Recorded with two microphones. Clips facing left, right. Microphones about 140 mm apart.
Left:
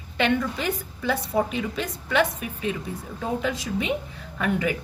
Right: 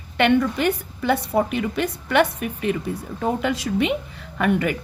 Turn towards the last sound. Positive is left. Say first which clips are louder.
# right 4 dB
turn(degrees=-60)  # may be behind; listen again after turning